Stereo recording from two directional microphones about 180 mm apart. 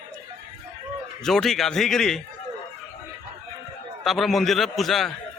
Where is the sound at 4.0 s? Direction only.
Centre (ahead or behind).